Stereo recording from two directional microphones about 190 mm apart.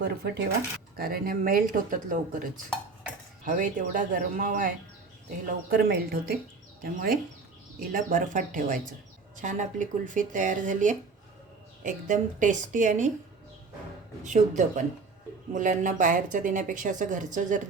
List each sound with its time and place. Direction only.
0.0 s speech: 60° right (ahead or behind)
0.9 s speech: 50° right (ahead or behind)
3.4 s speech: 45° right (ahead or behind)
5.7 s speech: 55° right (ahead or behind)
14.3 s speech: 40° right (ahead or behind)